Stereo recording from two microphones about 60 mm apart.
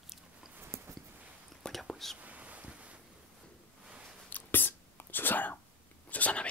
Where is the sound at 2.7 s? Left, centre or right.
Right.